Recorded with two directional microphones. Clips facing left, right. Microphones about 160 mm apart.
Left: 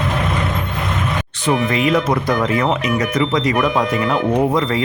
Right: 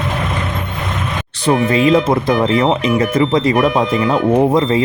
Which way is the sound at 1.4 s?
30° right (ahead or behind).